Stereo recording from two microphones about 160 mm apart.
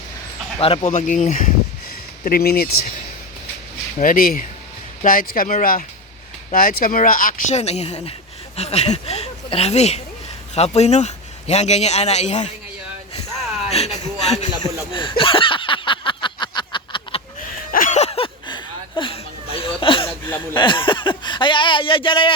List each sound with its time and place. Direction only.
0.6 s speech: 35° left (ahead or behind)
2.2 s speech: 70° left (ahead or behind)
3.9 s speech: 60° left (ahead or behind)
7.5 s speech: 40° left (ahead or behind)
13.7 s a sound: 40° left (ahead or behind)
14.9 s a sound: 30° left (ahead or behind)
17.7 s a sound: 55° left (ahead or behind); by 20.1 s 35° left (ahead or behind)
20.2 s speech: 15° left (ahead or behind)
20.6 s speech: 30° left (ahead or behind)